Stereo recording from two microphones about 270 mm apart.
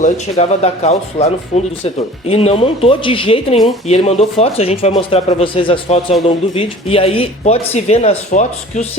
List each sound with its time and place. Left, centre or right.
0.0 s speech: left